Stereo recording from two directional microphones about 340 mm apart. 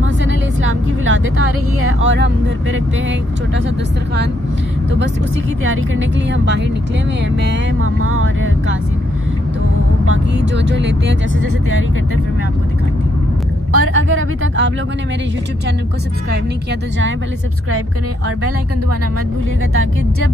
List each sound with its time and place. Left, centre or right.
0.2 s speech: right
5.7 s vehicle: right
10.0 s vehicle: right
13.7 s vehicle: right